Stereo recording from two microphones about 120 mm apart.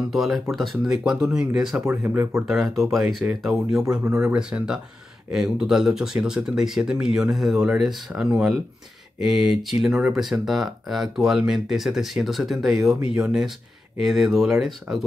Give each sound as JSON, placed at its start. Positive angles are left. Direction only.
{"t": 0.1, "sound": "speech", "side_deg": 0}
{"t": 1.9, "sound": "speech", "side_deg": -20}
{"t": 2.4, "sound": "speech", "side_deg": -5}